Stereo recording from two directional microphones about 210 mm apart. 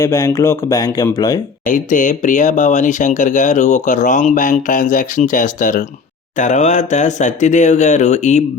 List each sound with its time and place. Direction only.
0.0 s speech: 15° left (ahead or behind)
1.6 s speech: 40° left (ahead or behind)